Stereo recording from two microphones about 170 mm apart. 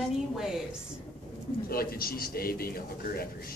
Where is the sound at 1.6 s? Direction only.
60° left (ahead or behind).